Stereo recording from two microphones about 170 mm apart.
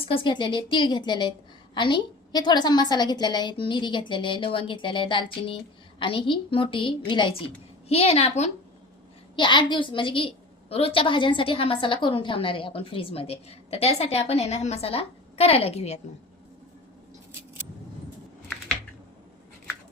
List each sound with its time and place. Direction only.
0.0 s a woman's voice: 30° left (ahead or behind)